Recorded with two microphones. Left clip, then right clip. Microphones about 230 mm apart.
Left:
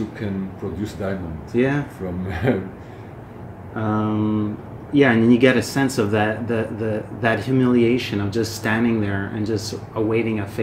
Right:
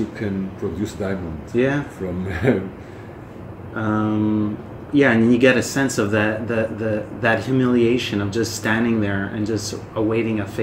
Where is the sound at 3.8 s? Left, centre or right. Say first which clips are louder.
Right 1 dB; left.